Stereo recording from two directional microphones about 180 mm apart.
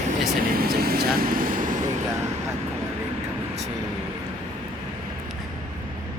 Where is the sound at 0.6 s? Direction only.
55° right (ahead or behind).